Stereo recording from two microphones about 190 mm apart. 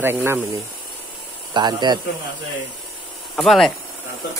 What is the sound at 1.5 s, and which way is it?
Speech, 25° right (ahead or behind).